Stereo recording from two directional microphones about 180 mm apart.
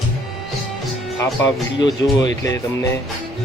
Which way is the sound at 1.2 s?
20° left (ahead or behind).